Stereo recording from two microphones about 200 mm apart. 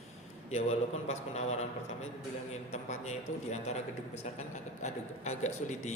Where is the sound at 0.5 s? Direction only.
35° left (ahead or behind).